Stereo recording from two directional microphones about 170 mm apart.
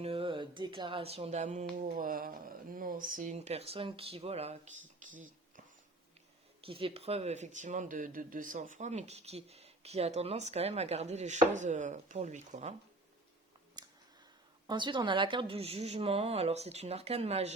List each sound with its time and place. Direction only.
0.0 s a sound: 30° right (ahead or behind)
1.8 s speech: 55° right (ahead or behind)
3.3 s speech: 40° right (ahead or behind)
6.6 s speech: 30° right (ahead or behind)
13.8 s a sound: 25° right (ahead or behind)
14.7 s speech: 25° right (ahead or behind)